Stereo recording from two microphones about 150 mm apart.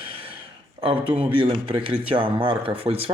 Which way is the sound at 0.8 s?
35° right (ahead or behind).